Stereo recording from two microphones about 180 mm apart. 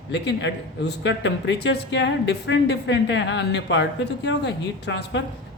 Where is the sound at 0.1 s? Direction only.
75° left (ahead or behind).